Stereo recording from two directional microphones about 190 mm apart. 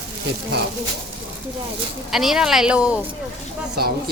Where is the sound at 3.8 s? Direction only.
55° right (ahead or behind).